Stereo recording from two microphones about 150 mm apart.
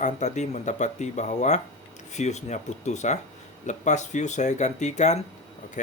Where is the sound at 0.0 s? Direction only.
50° left (ahead or behind).